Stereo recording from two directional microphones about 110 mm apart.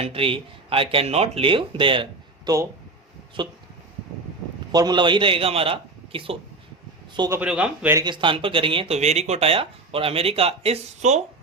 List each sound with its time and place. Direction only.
0.0 s a man's voice: 60° right (ahead or behind); by 3.5 s 45° right (ahead or behind)
4.7 s a man's voice: 40° right (ahead or behind); by 6.3 s 55° right (ahead or behind)
7.4 s a man's voice: 10° right (ahead or behind)
8.0 s a man's voice: 45° right (ahead or behind)
9.0 s speech: 80° right